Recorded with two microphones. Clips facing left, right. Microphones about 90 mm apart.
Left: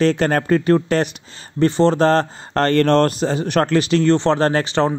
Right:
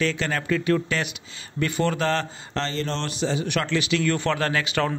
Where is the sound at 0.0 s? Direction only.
45° left (ahead or behind).